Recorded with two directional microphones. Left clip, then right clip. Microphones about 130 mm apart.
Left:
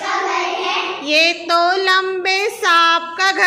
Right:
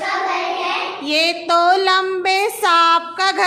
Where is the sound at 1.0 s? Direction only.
20° right (ahead or behind).